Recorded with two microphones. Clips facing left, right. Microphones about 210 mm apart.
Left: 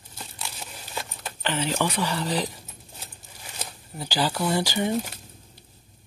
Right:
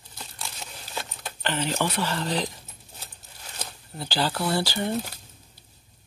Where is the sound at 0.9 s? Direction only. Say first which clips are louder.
Even; 5° left (ahead or behind).